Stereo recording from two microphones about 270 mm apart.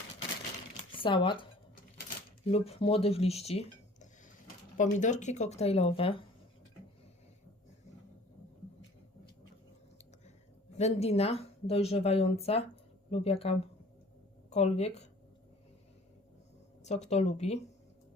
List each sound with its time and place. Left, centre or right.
0.9 s speech: centre
2.0 s dishes: left
4.8 s a woman's voice: left
10.8 s a woman's voice: left
16.8 s a woman's voice: left